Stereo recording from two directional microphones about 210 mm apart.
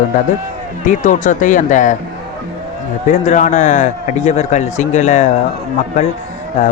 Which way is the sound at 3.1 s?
35° left (ahead or behind).